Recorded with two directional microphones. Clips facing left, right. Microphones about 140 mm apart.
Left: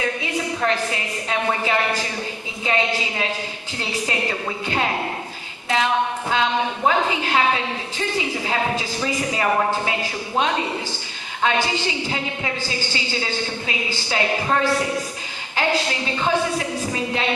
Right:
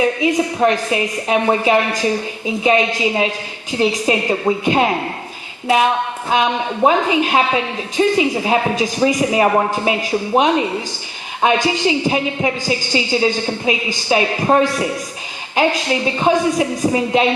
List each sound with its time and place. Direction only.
0.0 s a woman's voice: 20° right (ahead or behind)